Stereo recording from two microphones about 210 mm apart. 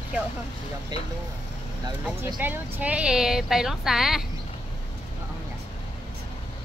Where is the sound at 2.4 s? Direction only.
10° right (ahead or behind).